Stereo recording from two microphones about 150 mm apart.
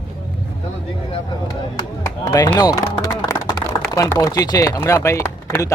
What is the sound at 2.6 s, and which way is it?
Speech, 25° left (ahead or behind).